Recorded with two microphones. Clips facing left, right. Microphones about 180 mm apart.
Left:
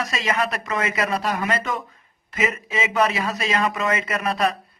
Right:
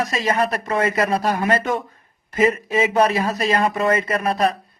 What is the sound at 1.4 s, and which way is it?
A man's voice, 50° right (ahead or behind).